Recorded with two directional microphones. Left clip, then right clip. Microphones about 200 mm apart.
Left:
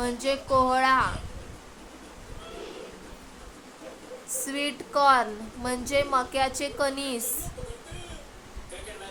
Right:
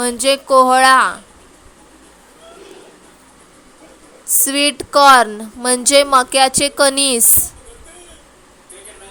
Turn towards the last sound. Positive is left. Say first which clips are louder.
# right 16 dB
turn(degrees=-45)  # may be behind; listen again after turning